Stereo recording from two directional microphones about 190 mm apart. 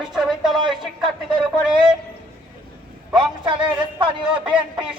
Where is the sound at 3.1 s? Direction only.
25° right (ahead or behind).